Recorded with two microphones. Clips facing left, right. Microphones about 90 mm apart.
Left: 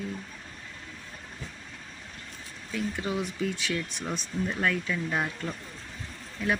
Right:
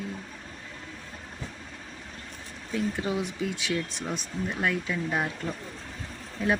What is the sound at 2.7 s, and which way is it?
Speech, 25° right (ahead or behind).